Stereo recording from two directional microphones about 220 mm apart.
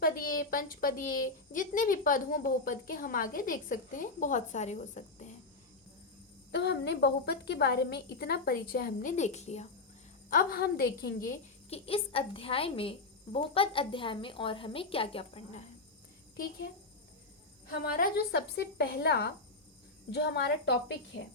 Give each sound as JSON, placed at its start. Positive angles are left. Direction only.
{"t": 0.0, "sound": "a woman's voice", "side_deg": 40}
{"t": 6.5, "sound": "a woman's voice", "side_deg": 50}
{"t": 11.7, "sound": "a woman's voice", "side_deg": 25}
{"t": 16.4, "sound": "a woman's voice", "side_deg": 45}
{"t": 17.8, "sound": "a woman's voice", "side_deg": 40}